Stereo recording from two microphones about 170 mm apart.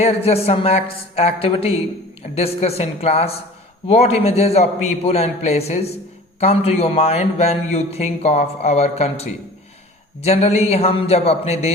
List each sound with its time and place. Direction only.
0.0 s speech: 35° left (ahead or behind)